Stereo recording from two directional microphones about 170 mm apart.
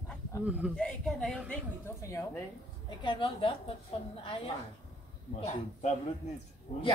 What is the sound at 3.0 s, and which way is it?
Speech, 30° left (ahead or behind).